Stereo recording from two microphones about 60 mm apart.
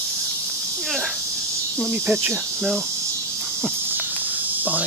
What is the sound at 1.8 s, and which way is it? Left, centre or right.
Speech, right.